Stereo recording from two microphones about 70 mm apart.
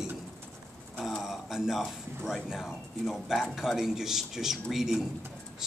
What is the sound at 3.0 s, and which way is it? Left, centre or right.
A man's voice, centre.